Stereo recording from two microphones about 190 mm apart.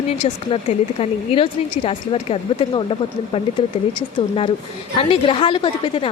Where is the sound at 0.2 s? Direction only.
30° left (ahead or behind).